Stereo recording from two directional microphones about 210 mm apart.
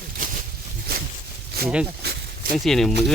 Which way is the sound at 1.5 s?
50° right (ahead or behind).